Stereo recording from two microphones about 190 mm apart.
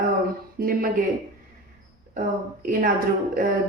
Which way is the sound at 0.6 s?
50° right (ahead or behind).